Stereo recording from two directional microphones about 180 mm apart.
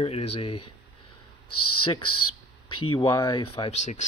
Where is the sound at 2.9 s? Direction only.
25° left (ahead or behind).